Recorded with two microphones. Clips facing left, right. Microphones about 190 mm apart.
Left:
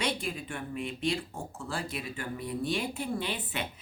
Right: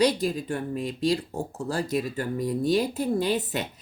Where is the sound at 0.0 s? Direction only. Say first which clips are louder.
Right 10 dB; 35° right (ahead or behind).